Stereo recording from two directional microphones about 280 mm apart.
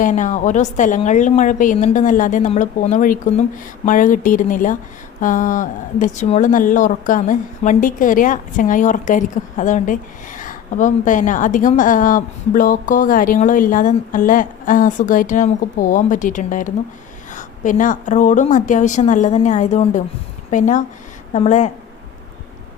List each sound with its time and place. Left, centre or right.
0.0 s speech: left